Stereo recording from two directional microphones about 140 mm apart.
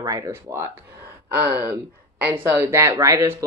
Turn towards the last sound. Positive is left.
turn(degrees=-20)  # may be behind; listen again after turning